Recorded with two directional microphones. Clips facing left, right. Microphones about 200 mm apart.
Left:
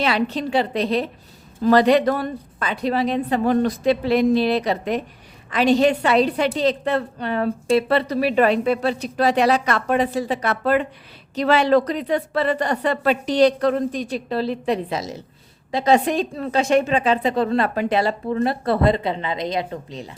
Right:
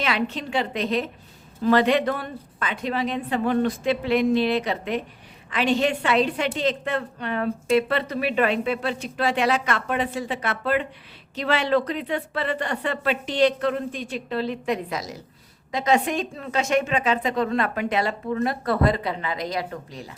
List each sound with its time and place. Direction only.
0.0 s a woman's voice: 35° left (ahead or behind)